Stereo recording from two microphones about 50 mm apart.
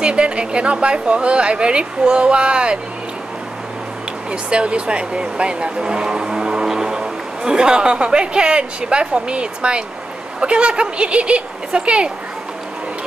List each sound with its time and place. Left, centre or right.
0.0 s speech: right
4.3 s speech: right